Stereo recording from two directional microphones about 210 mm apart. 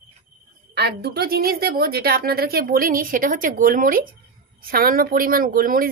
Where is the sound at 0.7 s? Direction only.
50° right (ahead or behind).